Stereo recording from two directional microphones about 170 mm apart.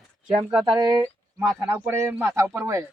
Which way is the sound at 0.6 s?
20° right (ahead or behind).